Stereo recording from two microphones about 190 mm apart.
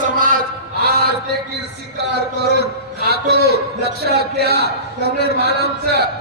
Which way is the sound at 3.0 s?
60° right (ahead or behind).